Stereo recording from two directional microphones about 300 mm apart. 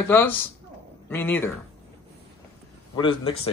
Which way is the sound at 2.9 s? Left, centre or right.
Centre.